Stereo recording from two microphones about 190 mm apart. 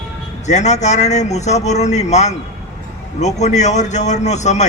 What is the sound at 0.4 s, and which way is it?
A man's voice, 35° left (ahead or behind).